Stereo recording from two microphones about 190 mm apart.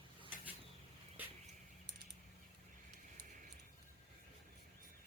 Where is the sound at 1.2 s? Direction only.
10° right (ahead or behind).